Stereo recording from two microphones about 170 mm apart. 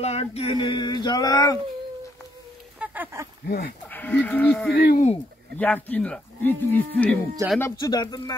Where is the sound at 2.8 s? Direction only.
10° right (ahead or behind).